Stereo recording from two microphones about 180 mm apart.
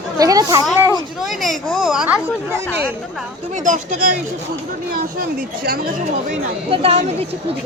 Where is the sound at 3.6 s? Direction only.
45° right (ahead or behind).